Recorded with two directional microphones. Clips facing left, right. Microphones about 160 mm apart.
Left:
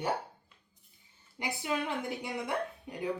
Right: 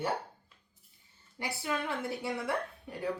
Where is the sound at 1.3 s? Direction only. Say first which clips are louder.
Left 1 dB; 15° left (ahead or behind).